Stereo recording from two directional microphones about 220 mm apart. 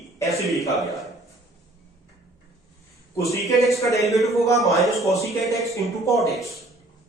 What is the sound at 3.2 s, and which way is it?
Speech, 15° left (ahead or behind).